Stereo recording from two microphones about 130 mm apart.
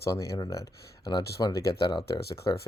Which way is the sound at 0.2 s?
25° left (ahead or behind).